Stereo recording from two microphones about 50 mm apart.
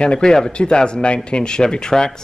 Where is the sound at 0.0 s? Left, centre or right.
Centre.